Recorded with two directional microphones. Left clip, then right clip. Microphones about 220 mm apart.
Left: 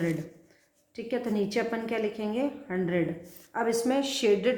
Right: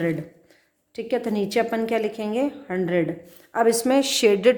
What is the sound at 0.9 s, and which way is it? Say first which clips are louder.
Speech: right 6 dB; 45° right (ahead or behind).